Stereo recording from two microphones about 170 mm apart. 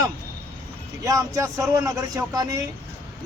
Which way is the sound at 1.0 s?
20° right (ahead or behind).